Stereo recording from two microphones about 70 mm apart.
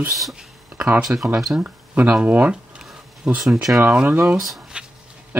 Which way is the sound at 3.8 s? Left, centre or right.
Centre.